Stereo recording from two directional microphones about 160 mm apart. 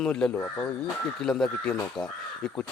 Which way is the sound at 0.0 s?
5° left (ahead or behind).